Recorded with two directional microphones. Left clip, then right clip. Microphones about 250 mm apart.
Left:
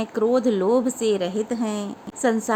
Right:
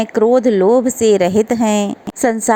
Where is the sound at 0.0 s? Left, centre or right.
Right.